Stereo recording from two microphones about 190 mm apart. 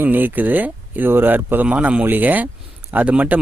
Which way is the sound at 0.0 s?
10° right (ahead or behind).